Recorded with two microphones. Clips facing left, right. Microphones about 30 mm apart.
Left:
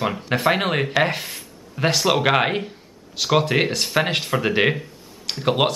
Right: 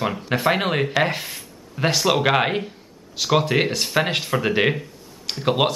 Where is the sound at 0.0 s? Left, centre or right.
Centre.